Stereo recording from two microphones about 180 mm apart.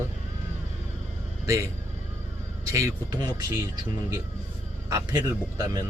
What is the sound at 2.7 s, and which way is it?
Speech, 15° right (ahead or behind).